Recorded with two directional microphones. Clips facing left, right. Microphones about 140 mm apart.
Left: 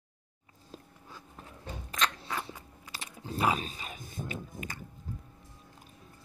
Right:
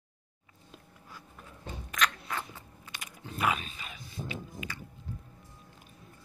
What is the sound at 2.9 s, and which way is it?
Wild animals, 35° left (ahead or behind).